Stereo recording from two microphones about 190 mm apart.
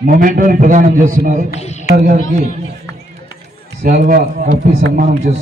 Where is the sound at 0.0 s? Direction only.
45° right (ahead or behind).